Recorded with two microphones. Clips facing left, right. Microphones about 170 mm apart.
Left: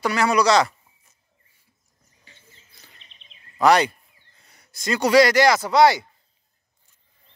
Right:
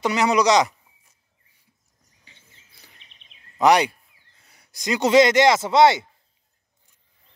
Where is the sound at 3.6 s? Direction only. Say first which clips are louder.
Even; 15° right (ahead or behind).